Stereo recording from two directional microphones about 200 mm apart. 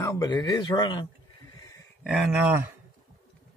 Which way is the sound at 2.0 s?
5° right (ahead or behind).